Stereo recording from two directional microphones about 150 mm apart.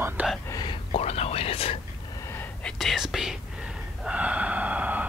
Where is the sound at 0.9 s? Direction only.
45° left (ahead or behind).